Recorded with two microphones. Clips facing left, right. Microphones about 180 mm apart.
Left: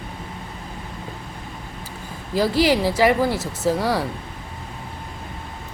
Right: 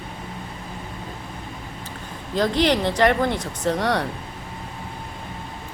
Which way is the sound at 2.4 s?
5° left (ahead or behind).